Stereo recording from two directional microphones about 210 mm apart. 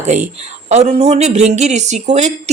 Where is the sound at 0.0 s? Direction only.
35° right (ahead or behind).